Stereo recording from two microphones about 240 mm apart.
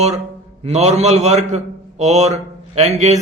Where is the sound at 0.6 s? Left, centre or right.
Right.